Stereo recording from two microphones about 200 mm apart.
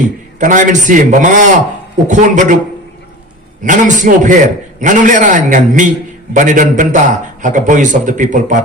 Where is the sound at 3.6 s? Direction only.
40° right (ahead or behind).